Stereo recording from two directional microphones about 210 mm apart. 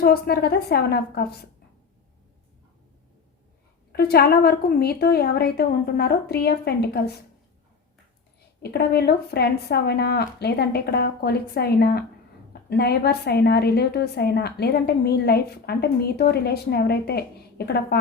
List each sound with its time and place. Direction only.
0.0 s a woman's voice: 50° left (ahead or behind)
3.9 s a woman's voice: 50° left (ahead or behind)
8.6 s a woman's voice: 50° left (ahead or behind)